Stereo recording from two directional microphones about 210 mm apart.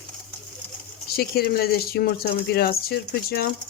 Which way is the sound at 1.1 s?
45° left (ahead or behind).